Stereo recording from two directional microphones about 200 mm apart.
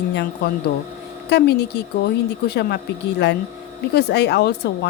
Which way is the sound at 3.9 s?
55° left (ahead or behind).